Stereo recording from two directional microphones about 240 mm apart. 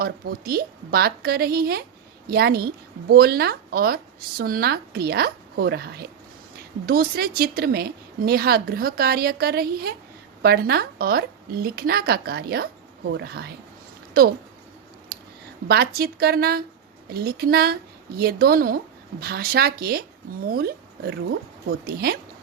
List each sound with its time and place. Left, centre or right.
0.0 s a woman's voice: right
15.1 s a sound: right
15.6 s a woman's voice: right